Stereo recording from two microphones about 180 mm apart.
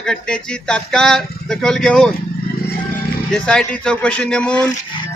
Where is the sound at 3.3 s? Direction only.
5° left (ahead or behind).